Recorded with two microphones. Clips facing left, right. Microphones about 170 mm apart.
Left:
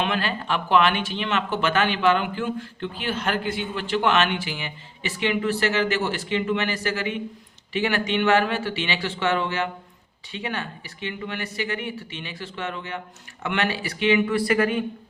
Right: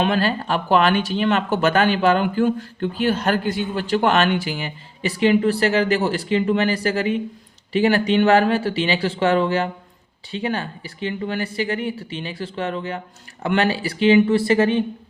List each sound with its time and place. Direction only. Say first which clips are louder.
0.0 s speech: right 6 dB; 40° right (ahead or behind)